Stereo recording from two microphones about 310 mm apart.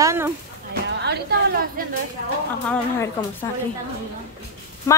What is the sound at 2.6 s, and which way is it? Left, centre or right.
Speech, centre.